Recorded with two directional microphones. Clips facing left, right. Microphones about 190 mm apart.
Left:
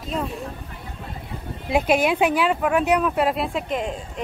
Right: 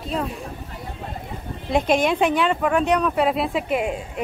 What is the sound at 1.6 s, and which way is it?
Speech, 5° left (ahead or behind).